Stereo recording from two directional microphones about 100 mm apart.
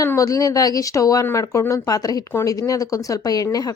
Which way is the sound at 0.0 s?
30° left (ahead or behind).